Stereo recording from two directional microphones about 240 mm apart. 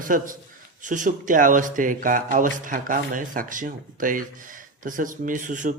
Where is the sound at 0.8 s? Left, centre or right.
Right.